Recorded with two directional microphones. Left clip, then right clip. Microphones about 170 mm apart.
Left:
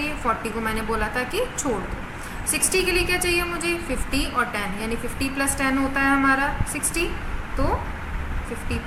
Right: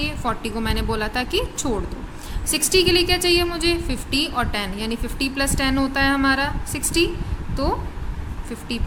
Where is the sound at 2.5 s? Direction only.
60° right (ahead or behind).